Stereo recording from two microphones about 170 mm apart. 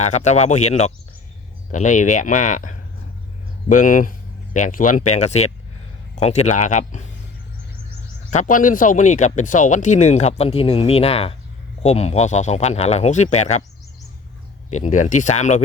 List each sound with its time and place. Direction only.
0.0 s speech: 45° left (ahead or behind)
8.3 s speech: 50° left (ahead or behind)
14.7 s speech: 45° left (ahead or behind)